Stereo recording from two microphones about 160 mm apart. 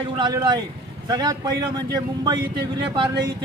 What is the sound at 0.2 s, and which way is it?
Speech, 25° right (ahead or behind).